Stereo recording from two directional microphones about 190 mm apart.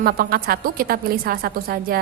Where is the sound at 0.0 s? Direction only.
50° right (ahead or behind).